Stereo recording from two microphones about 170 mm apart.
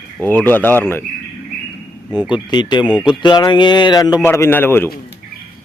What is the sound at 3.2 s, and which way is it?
A man's voice, 25° left (ahead or behind).